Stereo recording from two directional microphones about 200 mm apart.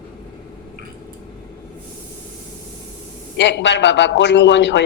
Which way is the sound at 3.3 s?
60° left (ahead or behind).